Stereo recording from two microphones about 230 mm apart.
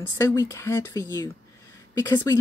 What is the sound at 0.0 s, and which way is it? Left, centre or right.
Speech, centre.